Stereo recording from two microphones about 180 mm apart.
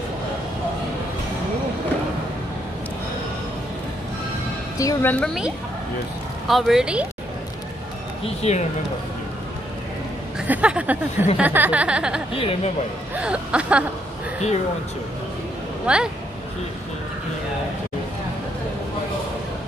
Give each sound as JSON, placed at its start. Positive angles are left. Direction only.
{"t": 4.7, "sound": "a woman's voice", "side_deg": 15}
{"t": 6.4, "sound": "speech", "side_deg": 0}
{"t": 8.2, "sound": "speech", "side_deg": 35}
{"t": 10.4, "sound": "speech", "side_deg": -10}
{"t": 12.4, "sound": "speech", "side_deg": 30}
{"t": 13.1, "sound": "speech", "side_deg": -5}
{"t": 15.9, "sound": "speech", "side_deg": -5}